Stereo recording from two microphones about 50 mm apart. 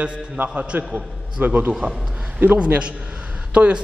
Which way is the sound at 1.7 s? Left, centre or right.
Centre.